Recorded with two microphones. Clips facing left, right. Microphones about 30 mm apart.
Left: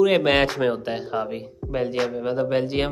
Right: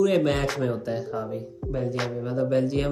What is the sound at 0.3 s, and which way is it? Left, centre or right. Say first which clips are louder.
Speech: left 6 dB; left.